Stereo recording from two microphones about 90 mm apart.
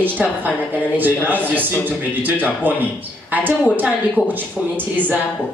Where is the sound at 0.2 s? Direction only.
15° right (ahead or behind).